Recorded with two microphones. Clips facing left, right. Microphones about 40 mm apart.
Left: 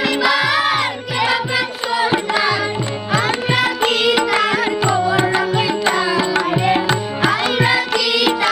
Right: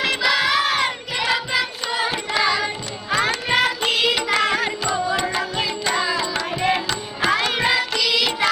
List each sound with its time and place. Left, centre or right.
0.2 s music: centre
3.1 s music: centre
4.9 s music: centre
5.9 s music: centre
6.1 s music: left
7.3 s music: centre